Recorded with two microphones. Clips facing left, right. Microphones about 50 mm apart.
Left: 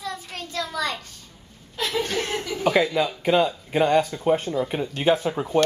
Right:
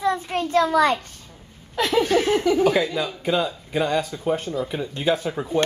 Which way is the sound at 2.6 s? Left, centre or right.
Centre.